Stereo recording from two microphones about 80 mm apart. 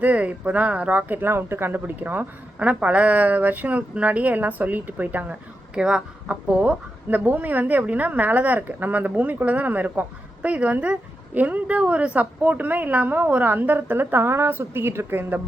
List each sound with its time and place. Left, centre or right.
0.0 s speech: centre